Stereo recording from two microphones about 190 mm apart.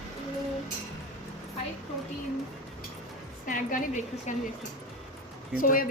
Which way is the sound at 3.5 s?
40° left (ahead or behind).